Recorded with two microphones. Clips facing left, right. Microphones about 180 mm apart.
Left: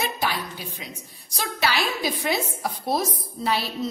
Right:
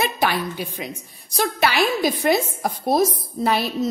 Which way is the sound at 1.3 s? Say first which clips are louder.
Right 6 dB; 55° right (ahead or behind).